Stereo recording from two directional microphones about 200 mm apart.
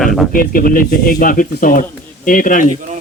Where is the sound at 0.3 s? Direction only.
45° left (ahead or behind).